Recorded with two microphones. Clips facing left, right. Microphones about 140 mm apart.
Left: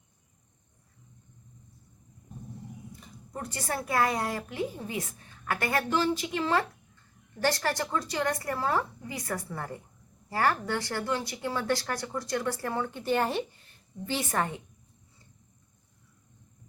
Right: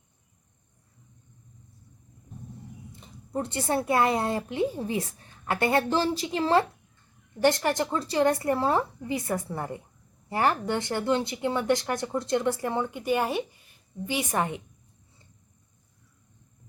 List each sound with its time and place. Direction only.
2.9 s speech: 25° right (ahead or behind)
7.4 s speech: 20° right (ahead or behind)